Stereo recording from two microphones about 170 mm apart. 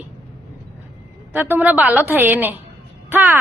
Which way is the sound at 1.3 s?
10° right (ahead or behind).